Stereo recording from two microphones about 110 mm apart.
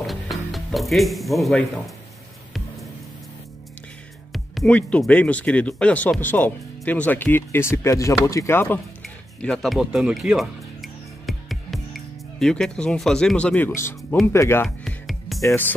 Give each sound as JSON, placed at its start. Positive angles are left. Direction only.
{"t": 0.0, "sound": "music", "side_deg": 0}
{"t": 4.6, "sound": "speech", "side_deg": 10}
{"t": 9.4, "sound": "music", "side_deg": 5}
{"t": 14.2, "sound": "speech", "side_deg": 25}
{"t": 14.9, "sound": "music", "side_deg": 0}
{"t": 15.4, "sound": "speech", "side_deg": 20}